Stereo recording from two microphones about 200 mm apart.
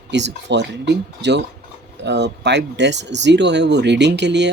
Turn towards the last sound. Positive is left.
turn(degrees=-60)  # may be behind; listen again after turning